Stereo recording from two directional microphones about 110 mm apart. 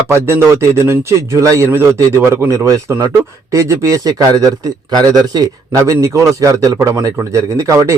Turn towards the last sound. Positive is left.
turn(degrees=-30)  # may be behind; listen again after turning